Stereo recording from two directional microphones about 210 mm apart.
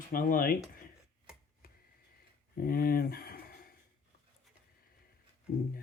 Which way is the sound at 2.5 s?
45° left (ahead or behind).